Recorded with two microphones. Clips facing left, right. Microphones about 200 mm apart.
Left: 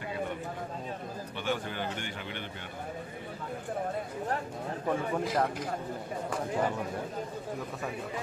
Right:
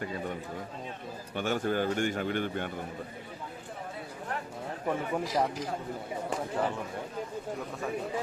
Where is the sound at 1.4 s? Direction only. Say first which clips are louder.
Right 5 dB; 45° right (ahead or behind).